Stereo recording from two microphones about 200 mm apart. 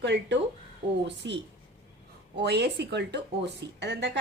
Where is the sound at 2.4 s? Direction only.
55° right (ahead or behind).